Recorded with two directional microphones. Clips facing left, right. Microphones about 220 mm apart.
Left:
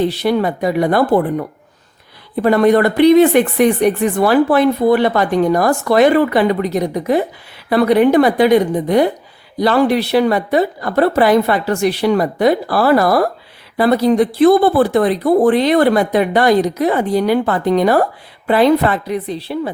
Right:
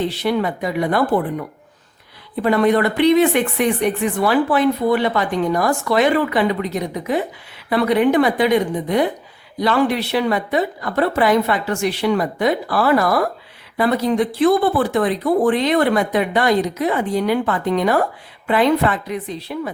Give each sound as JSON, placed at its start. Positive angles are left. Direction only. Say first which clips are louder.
{"t": 0.2, "sound": "speech", "louder": "left 4 dB", "side_deg": 40}